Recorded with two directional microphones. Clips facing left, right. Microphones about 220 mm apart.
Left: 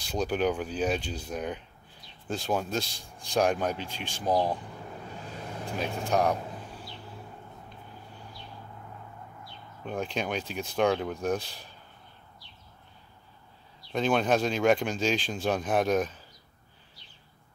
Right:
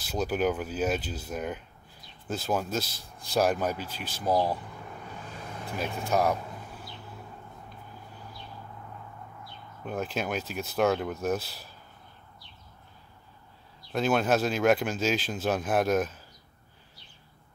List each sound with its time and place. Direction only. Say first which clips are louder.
0.0 s speech: even; 5° right (ahead or behind)
4.3 s speech: even; 20° left (ahead or behind)
5.8 s speech: even; 5° right (ahead or behind)
9.8 s speech: even; 5° right (ahead or behind)
13.9 s speech: even; 5° right (ahead or behind)